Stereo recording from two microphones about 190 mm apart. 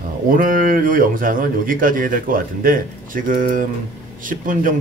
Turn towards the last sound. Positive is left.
turn(degrees=-45)  # may be behind; listen again after turning